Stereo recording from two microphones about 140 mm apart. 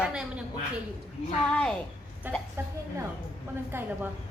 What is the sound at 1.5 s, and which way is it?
Speech, 5° left (ahead or behind).